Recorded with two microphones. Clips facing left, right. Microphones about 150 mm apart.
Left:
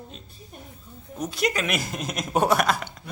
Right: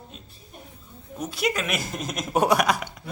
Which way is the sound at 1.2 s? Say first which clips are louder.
Left 1 dB; 5° right (ahead or behind).